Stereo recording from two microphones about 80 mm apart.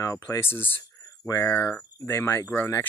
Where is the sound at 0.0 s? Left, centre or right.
Left.